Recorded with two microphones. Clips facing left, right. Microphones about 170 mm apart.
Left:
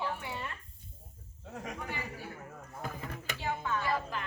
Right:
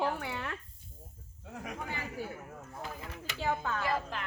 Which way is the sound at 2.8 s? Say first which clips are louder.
Left 2 dB; 45° left (ahead or behind).